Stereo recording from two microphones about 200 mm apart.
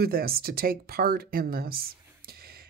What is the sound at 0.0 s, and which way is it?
Speech, 50° right (ahead or behind).